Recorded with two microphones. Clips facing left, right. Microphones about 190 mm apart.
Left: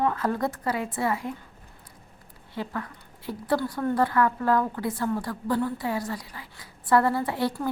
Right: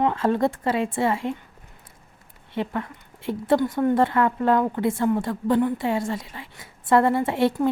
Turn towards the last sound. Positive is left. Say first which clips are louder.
# right 6 dB
turn(degrees=-25)  # may be behind; listen again after turning